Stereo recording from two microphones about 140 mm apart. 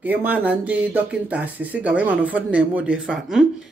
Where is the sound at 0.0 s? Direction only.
10° right (ahead or behind).